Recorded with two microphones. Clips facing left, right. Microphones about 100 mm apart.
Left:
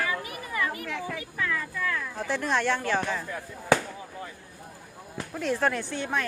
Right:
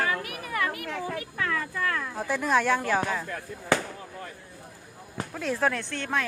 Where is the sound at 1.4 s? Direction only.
60° right (ahead or behind).